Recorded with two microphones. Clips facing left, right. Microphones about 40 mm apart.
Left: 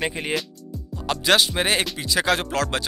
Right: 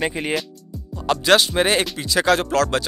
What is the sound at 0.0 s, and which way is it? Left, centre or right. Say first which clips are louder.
Speech: right 3 dB; centre.